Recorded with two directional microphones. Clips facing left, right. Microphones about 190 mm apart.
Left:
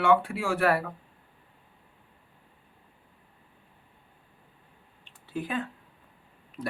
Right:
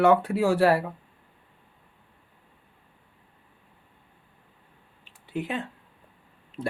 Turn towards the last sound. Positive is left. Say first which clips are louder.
# right 4 dB
turn(degrees=-25)  # may be behind; listen again after turning